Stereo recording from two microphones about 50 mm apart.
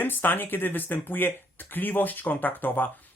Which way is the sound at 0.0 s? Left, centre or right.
Left.